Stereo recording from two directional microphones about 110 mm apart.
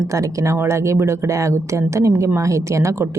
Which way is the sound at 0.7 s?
25° right (ahead or behind).